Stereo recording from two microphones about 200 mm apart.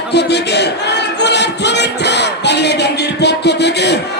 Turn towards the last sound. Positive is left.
turn(degrees=60)  # may be behind; listen again after turning